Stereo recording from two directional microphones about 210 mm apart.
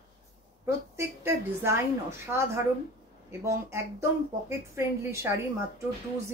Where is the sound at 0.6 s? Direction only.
10° right (ahead or behind).